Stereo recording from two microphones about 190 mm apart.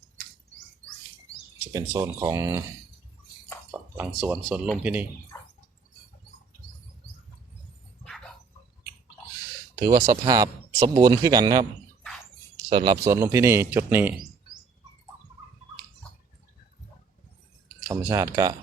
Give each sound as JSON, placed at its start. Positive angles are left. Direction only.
{"t": 1.7, "sound": "speech", "side_deg": -15}
{"t": 3.7, "sound": "speech", "side_deg": -10}
{"t": 5.3, "sound": "a sound", "side_deg": 10}
{"t": 9.7, "sound": "speech", "side_deg": -20}
{"t": 12.6, "sound": "speech", "side_deg": -25}
{"t": 17.8, "sound": "speech", "side_deg": -15}